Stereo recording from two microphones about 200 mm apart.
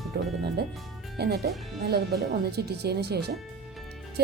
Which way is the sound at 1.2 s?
55° right (ahead or behind).